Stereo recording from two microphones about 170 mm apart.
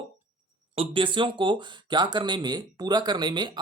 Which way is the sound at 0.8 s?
30° right (ahead or behind).